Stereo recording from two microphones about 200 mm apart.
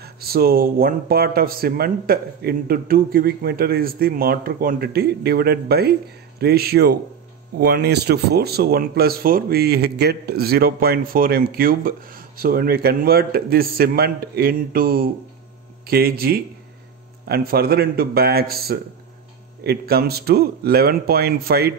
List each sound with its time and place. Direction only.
0.0 s speech: 50° right (ahead or behind)